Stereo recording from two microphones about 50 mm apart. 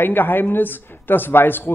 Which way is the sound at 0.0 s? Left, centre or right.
Left.